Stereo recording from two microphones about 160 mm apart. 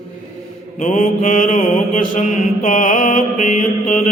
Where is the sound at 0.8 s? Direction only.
50° left (ahead or behind).